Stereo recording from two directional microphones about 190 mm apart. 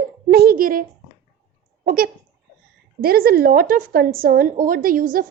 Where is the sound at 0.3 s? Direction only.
55° right (ahead or behind).